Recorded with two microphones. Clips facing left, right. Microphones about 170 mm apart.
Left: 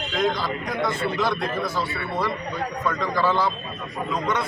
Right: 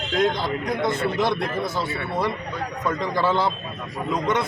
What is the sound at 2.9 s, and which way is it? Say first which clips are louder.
Speech: right 1 dB; 20° right (ahead or behind).